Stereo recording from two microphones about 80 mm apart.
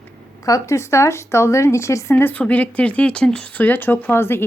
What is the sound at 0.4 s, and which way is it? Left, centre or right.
Speech, left.